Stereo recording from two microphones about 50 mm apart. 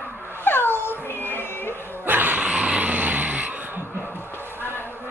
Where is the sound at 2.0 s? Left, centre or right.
Right.